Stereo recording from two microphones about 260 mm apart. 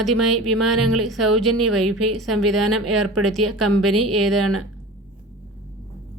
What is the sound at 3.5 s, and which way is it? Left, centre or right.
Speech, right.